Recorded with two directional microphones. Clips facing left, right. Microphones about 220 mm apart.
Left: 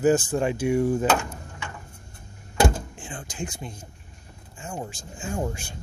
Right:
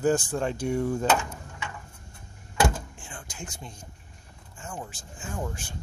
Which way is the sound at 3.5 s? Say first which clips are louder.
Left 5 dB; 10° left (ahead or behind).